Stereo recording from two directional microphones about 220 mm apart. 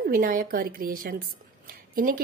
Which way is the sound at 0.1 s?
40° right (ahead or behind).